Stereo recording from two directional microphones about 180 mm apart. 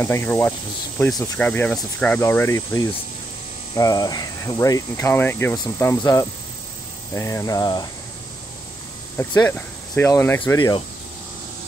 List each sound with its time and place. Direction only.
0.0 s speech: 15° left (ahead or behind)
9.1 s speech: 15° left (ahead or behind)